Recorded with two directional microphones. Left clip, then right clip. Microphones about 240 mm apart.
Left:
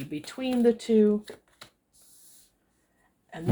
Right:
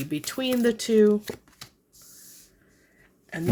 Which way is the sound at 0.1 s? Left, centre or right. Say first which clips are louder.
Right 4 dB; right.